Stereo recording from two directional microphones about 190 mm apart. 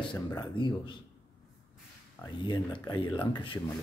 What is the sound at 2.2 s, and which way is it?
Speech, 20° left (ahead or behind).